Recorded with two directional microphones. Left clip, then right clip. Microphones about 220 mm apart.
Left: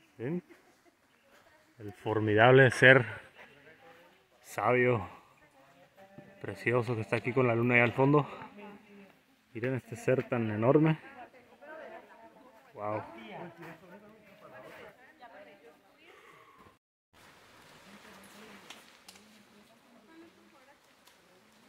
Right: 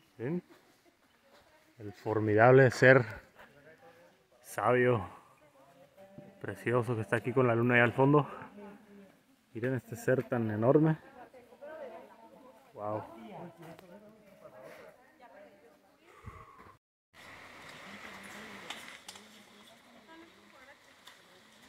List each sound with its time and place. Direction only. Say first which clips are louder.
0.2 s speech: even; centre (ahead or behind)
1.8 s speech: left 1 dB; 5° left (ahead or behind)
4.6 s speech: even; 5° left (ahead or behind)
6.6 s speech: left 1 dB; 5° left (ahead or behind)
9.7 s speech: left 1 dB; 5° left (ahead or behind)
11.6 s a sound: right 2 dB; 40° right (ahead or behind)
12.7 s speech: left 1 dB; 15° left (ahead or behind)
13.2 s a sound: left 3 dB; 50° right (ahead or behind)
16.1 s a sound: right 3 dB; centre (ahead or behind)